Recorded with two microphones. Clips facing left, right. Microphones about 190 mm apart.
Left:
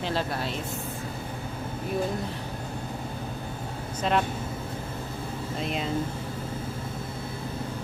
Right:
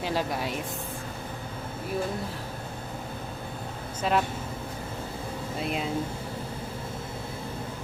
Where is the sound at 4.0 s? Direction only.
5° right (ahead or behind).